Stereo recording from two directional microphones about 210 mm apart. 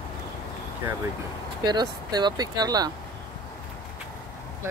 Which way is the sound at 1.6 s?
20° right (ahead or behind).